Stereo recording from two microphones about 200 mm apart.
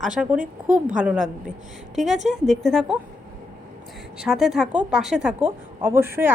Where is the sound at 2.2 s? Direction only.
Centre (ahead or behind).